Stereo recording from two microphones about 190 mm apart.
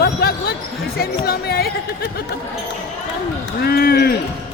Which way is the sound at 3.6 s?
55° left (ahead or behind).